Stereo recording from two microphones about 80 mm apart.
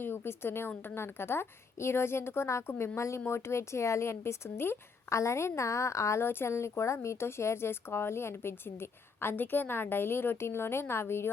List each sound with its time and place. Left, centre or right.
0.0 s a woman's voice: left